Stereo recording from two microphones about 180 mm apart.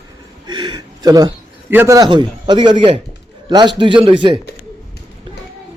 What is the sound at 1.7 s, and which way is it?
A man's voice, 15° right (ahead or behind).